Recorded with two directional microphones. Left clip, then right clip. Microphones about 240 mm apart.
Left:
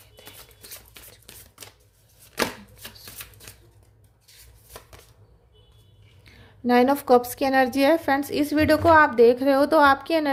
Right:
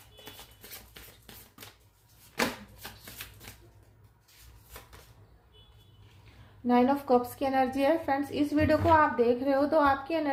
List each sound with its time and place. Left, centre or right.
6.7 s a woman's voice: left